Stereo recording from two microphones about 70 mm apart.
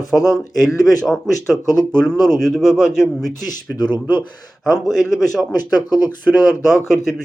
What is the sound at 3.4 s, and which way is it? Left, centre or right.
Speech, left.